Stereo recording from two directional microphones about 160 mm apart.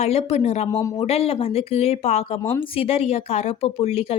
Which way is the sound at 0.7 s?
20° left (ahead or behind).